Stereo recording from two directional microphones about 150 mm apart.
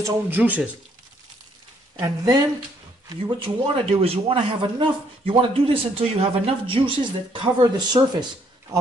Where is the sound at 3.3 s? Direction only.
40° right (ahead or behind).